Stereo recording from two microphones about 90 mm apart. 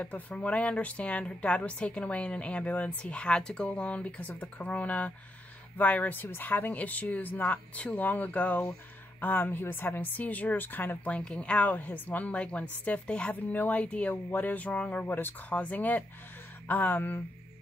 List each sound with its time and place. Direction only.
0.0 s a woman's voice: 15° left (ahead or behind)